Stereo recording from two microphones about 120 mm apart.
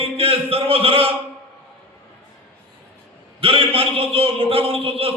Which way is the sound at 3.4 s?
50° right (ahead or behind).